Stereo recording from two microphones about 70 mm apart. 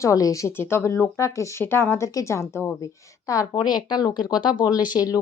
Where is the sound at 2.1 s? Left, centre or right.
Left.